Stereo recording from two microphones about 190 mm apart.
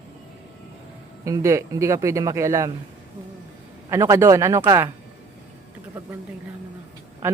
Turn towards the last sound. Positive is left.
turn(degrees=-15)  # may be behind; listen again after turning